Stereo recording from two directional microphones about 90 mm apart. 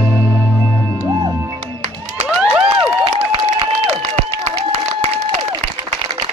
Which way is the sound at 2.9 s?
70° right (ahead or behind).